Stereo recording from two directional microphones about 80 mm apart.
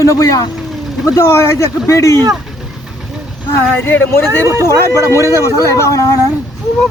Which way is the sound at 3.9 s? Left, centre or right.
Left.